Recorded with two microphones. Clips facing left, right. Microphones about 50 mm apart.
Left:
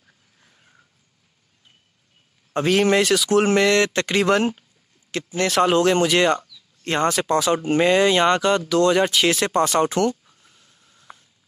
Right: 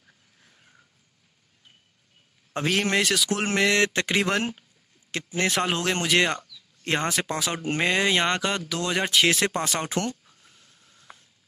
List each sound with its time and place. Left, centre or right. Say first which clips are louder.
0.4 s a sound: left 2 dB; centre
2.5 s speech: left 6 dB; centre
4.2 s speech: left 7 dB; centre
5.1 s speech: left 5 dB; right
5.5 s speech: left 12 dB; centre
10.5 s a sound: left 1 dB; centre